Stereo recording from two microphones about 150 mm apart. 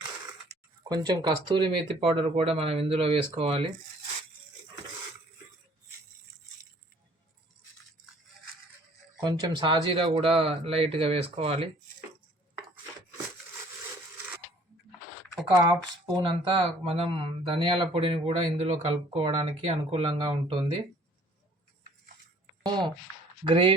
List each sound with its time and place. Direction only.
0.9 s speech: 25° right (ahead or behind)
9.2 s speech: 30° right (ahead or behind)
15.6 s speech: 30° right (ahead or behind)
22.6 s a sound: 30° right (ahead or behind)
23.4 s speech: 35° right (ahead or behind)